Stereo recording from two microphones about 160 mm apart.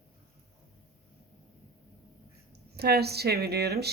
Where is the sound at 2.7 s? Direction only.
90° right.